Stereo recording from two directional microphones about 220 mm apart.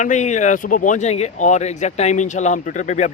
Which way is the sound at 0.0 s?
35° left (ahead or behind).